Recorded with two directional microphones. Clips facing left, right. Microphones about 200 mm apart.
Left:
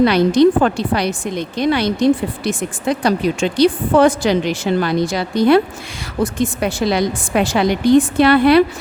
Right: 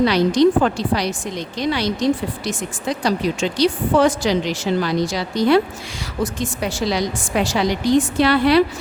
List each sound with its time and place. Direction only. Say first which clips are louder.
0.0 s a woman's voice: left 3 dB; 55° left (ahead or behind)